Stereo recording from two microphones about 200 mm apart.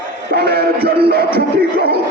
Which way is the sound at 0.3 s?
50° right (ahead or behind).